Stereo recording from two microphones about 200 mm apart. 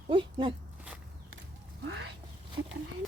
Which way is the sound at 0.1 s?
25° right (ahead or behind).